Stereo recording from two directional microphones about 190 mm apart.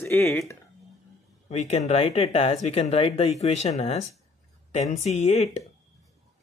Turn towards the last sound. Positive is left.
turn(degrees=35)  # may be behind; listen again after turning